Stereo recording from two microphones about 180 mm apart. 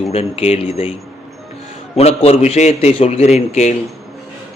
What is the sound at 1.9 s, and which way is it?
A man's voice, 35° left (ahead or behind).